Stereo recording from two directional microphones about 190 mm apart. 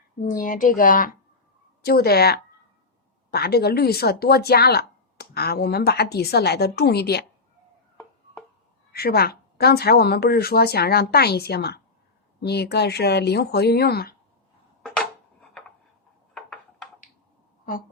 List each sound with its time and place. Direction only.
0.2 s speech: 45° left (ahead or behind)
8.9 s speech: 55° left (ahead or behind)
14.8 s a sound: 5° left (ahead or behind)